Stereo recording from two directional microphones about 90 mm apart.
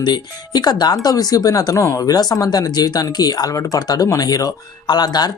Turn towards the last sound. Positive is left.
turn(degrees=50)  # may be behind; listen again after turning